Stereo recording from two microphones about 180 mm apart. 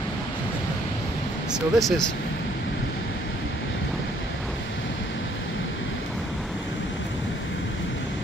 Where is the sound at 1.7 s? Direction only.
Centre (ahead or behind).